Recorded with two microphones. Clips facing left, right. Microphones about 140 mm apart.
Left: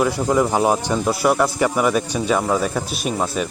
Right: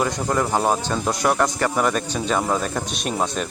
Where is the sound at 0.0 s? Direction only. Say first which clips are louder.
Left 4 dB; 5° left (ahead or behind).